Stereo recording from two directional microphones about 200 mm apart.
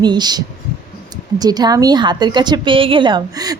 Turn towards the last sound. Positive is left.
turn(degrees=-20)  # may be behind; listen again after turning